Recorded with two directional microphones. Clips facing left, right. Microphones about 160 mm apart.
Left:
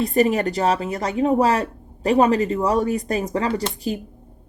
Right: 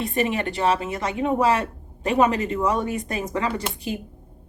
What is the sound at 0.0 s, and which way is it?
A woman's voice, 35° left (ahead or behind).